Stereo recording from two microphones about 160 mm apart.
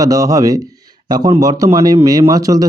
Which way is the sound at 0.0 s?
20° right (ahead or behind).